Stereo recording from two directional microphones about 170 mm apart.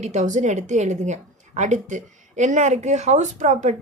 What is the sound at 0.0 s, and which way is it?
A woman's voice, 45° right (ahead or behind).